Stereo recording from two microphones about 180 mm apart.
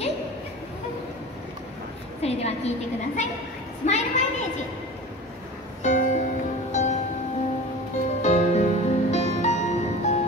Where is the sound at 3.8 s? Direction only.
40° left (ahead or behind).